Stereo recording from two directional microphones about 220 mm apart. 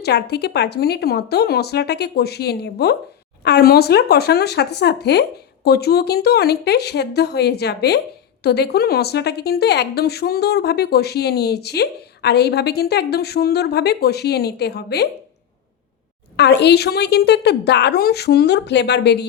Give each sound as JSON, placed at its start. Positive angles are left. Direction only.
{"t": 0.0, "sound": "a woman's voice", "side_deg": 50}
{"t": 16.4, "sound": "a woman's voice", "side_deg": 50}